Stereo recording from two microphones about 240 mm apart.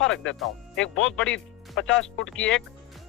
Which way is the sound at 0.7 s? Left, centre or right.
Left.